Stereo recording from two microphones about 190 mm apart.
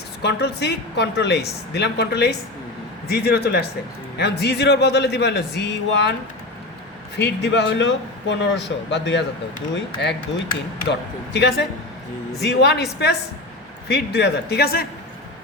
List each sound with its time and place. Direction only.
0.2 s a woman's voice: 60° left (ahead or behind)
7.4 s a man's voice: 65° left (ahead or behind)
11.3 s a woman's voice: 60° left (ahead or behind)